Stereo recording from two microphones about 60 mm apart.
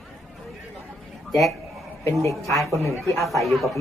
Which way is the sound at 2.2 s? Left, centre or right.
Left.